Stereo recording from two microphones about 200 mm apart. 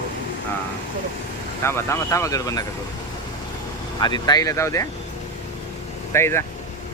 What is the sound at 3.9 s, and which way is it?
Speech, 20° left (ahead or behind).